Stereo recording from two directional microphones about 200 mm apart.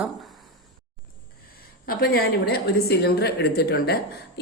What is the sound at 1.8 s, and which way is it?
A woman's voice, 50° left (ahead or behind).